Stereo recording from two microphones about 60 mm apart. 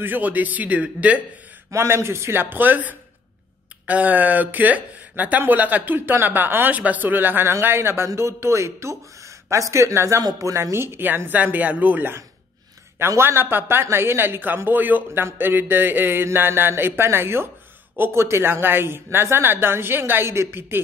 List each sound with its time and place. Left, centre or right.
0.0 s speech: right
1.7 s a man's voice: right
2.5 s speech: right
13.2 s speech: right